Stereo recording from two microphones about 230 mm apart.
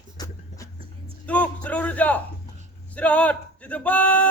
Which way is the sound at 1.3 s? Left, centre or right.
Centre.